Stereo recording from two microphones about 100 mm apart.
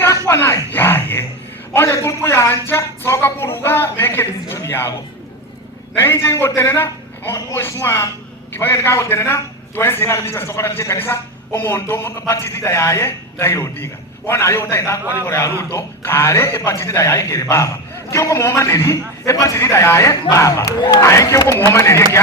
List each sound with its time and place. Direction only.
0.3 s a sound: 30° left (ahead or behind)
1.7 s a man's voice: 25° left (ahead or behind)
6.2 s a man's voice: 25° left (ahead or behind)